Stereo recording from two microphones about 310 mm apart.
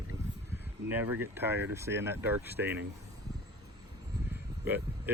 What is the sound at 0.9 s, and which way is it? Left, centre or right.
Speech, centre.